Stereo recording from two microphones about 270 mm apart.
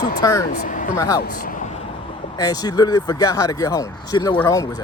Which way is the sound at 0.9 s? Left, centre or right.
Centre.